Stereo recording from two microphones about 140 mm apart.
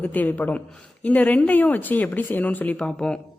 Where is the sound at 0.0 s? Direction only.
10° left (ahead or behind).